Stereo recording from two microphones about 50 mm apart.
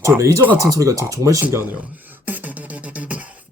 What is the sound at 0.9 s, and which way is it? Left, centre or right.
Speech, right.